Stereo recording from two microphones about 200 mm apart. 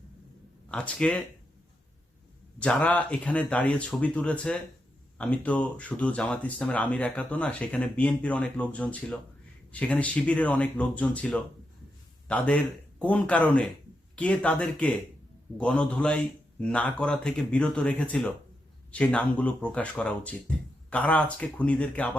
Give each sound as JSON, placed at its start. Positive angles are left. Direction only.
{"t": 0.7, "sound": "a man's voice", "side_deg": 5}
{"t": 2.6, "sound": "a man's voice", "side_deg": 5}